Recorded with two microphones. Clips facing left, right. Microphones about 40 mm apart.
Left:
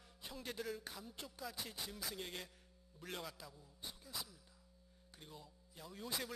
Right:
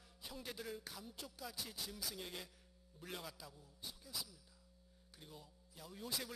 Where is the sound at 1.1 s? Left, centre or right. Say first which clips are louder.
Left 2 dB; centre.